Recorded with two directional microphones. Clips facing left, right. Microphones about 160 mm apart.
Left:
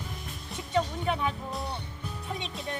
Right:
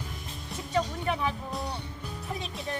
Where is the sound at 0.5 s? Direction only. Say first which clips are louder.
Left 1 dB; centre (ahead or behind).